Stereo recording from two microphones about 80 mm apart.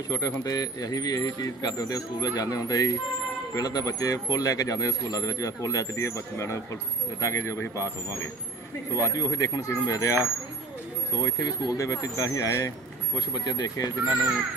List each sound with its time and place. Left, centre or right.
0.1 s speech: left
8.9 s speech: left
13.1 s speech: left